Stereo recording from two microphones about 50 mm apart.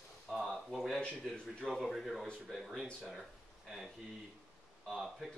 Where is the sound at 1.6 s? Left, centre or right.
Centre.